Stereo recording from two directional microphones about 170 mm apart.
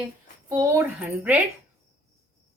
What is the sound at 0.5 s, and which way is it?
Speech, 20° right (ahead or behind).